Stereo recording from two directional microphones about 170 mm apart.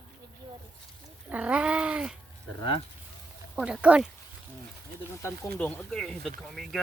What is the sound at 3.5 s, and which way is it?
Speech, 5° right (ahead or behind).